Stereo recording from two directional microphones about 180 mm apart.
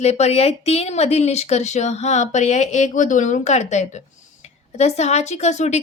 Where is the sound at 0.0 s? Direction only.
35° left (ahead or behind).